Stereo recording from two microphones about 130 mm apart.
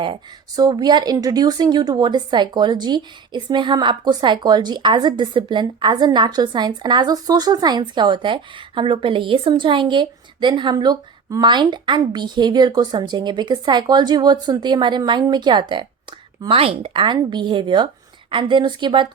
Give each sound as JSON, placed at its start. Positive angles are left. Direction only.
{"t": 0.0, "sound": "speech", "side_deg": -35}